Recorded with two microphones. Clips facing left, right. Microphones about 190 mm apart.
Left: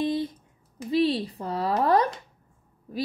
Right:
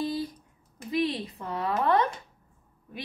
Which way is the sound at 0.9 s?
30° left (ahead or behind).